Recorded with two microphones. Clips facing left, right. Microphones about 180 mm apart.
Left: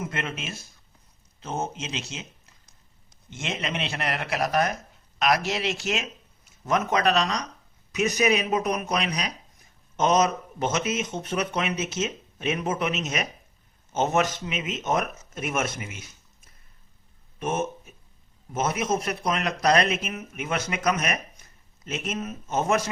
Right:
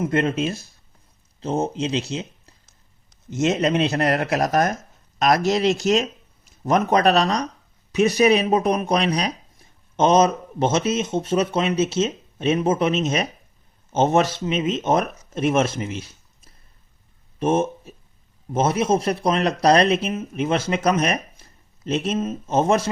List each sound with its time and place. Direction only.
0.0 s speech: 35° right (ahead or behind)